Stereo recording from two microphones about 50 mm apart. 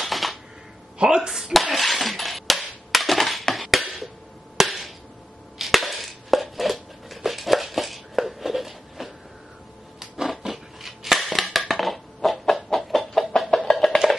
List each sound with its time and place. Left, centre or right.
0.0 s typewriter: centre
0.9 s speech: centre
1.4 s a sound: centre
5.6 s chopping: centre
7.2 s a sound: centre
13.4 s music: centre